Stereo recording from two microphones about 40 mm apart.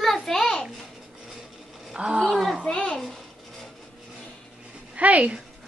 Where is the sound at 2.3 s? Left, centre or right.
Centre.